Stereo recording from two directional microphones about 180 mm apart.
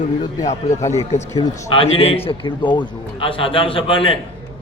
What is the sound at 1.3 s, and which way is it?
A man's voice, 25° left (ahead or behind).